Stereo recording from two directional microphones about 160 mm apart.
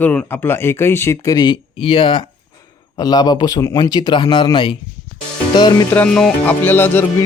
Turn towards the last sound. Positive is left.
turn(degrees=15)  # may be behind; listen again after turning